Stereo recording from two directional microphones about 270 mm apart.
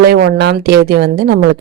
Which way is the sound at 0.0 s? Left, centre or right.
Right.